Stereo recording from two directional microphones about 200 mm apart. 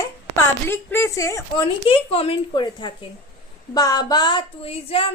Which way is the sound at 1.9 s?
30° left (ahead or behind).